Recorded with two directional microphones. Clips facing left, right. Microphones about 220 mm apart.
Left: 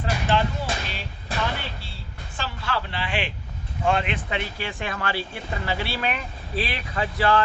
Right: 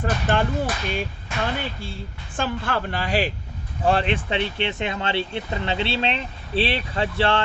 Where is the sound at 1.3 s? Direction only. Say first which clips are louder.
Even; 35° left (ahead or behind).